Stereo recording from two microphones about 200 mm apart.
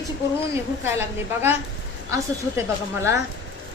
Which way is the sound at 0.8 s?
10° right (ahead or behind).